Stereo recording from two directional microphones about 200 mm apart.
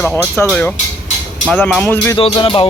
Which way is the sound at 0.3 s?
10° left (ahead or behind).